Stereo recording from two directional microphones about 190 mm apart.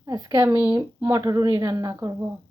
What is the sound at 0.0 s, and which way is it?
A woman's voice, 20° right (ahead or behind).